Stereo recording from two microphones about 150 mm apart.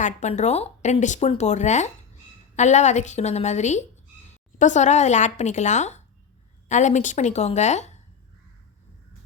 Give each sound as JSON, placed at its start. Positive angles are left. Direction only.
{"t": 0.0, "sound": "speech", "side_deg": 50}